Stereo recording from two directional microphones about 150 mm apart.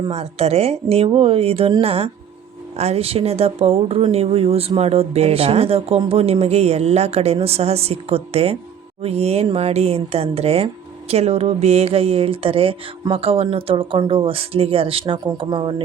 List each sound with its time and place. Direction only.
0.1 s speech: 45° right (ahead or behind)